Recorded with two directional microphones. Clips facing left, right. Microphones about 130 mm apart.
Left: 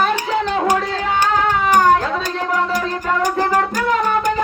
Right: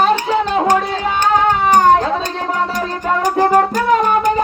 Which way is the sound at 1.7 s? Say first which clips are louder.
Right 2 dB; 35° right (ahead or behind).